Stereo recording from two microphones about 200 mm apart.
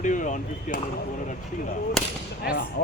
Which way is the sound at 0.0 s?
40° left (ahead or behind).